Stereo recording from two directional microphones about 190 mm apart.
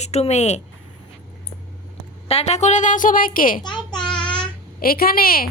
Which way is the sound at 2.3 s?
35° left (ahead or behind).